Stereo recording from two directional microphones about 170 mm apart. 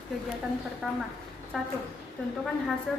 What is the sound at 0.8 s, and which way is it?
Speech, centre (ahead or behind).